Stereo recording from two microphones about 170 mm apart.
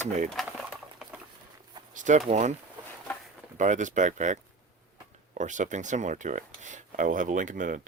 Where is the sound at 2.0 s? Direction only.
45° right (ahead or behind).